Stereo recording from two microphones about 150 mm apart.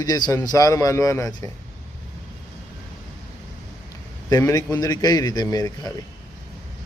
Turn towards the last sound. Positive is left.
turn(degrees=25)  # may be behind; listen again after turning